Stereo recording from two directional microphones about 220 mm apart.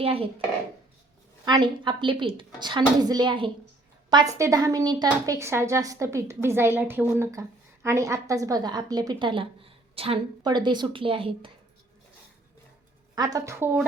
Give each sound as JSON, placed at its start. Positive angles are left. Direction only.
{"t": 0.0, "sound": "a woman's voice", "side_deg": -25}
{"t": 1.5, "sound": "a woman's voice", "side_deg": -20}
{"t": 13.1, "sound": "speech", "side_deg": -15}